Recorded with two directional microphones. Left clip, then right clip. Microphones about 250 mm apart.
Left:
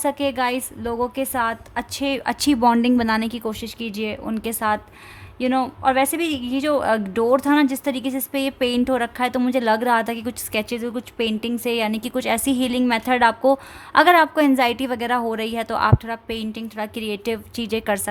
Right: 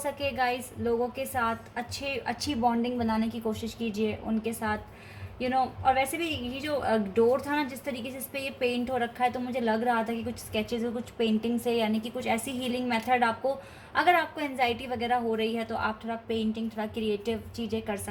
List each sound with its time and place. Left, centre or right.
0.0 s a woman's voice: left
16.5 s a woman's voice: left
17.2 s a woman's voice: left